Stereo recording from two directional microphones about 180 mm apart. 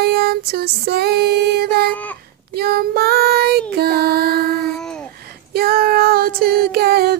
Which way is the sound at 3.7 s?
60° right (ahead or behind).